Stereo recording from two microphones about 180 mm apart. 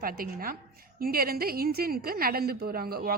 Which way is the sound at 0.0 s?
55° right (ahead or behind).